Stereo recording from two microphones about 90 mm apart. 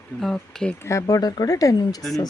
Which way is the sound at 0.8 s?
35° left (ahead or behind).